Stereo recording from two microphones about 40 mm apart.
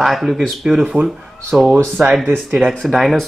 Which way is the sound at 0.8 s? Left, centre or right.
Right.